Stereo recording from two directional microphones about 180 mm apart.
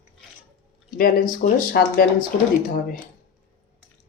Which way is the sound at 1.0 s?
55° left (ahead or behind).